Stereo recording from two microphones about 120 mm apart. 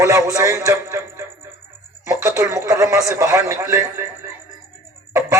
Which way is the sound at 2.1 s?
25° right (ahead or behind).